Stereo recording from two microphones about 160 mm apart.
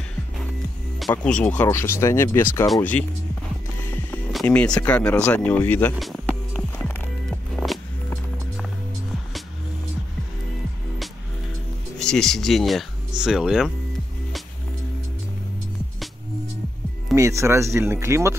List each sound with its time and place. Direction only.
1.1 s speech: 5° left (ahead or behind)
4.3 s speech: 5° left (ahead or behind)
5.9 s music: centre (ahead or behind)
12.0 s speech: 5° left (ahead or behind)
17.1 s speech: 20° right (ahead or behind)